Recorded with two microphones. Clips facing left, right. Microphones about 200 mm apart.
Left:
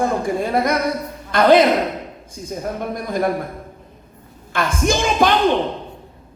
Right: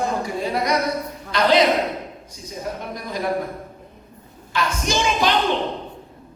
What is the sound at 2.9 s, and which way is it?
Speech, 50° left (ahead or behind).